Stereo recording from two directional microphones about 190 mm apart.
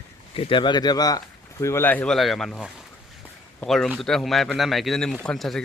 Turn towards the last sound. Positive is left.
turn(degrees=0)  # may be behind; listen again after turning